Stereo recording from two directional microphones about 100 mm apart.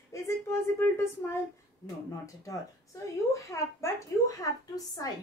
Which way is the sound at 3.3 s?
30° left (ahead or behind).